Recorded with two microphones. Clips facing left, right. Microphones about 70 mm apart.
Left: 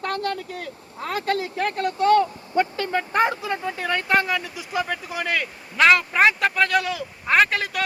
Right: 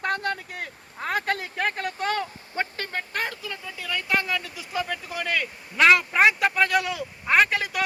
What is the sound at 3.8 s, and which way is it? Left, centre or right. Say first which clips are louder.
Speech: left 5 dB; left.